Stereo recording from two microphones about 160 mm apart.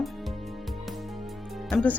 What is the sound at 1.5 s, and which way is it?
Music, centre (ahead or behind).